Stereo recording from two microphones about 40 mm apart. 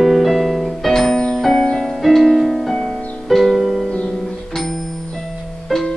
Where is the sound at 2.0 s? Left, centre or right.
Centre.